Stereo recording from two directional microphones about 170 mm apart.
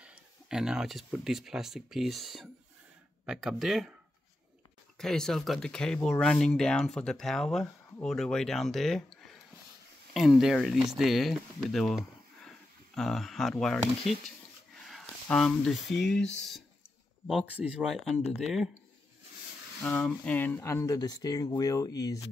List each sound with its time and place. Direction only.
0.0 s speech: 5° right (ahead or behind)
4.9 s speech: 5° left (ahead or behind)
17.6 s speech: 5° right (ahead or behind)
19.8 s speech: 10° left (ahead or behind)